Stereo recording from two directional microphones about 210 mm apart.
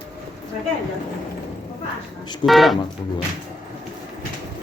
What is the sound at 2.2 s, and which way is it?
Speech, 20° left (ahead or behind).